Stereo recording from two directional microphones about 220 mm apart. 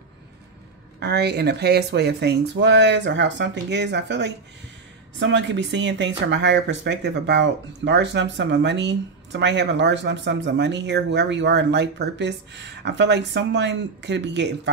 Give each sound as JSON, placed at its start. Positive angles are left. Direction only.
{"t": 0.9, "sound": "speech", "side_deg": -45}